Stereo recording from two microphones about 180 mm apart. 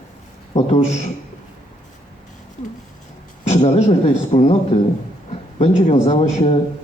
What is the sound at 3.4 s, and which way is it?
A man's voice, 35° left (ahead or behind).